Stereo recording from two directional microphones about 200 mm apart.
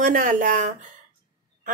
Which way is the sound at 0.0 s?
45° right (ahead or behind).